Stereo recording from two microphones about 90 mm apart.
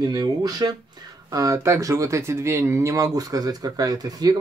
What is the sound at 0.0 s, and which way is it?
Speech, 50° right (ahead or behind).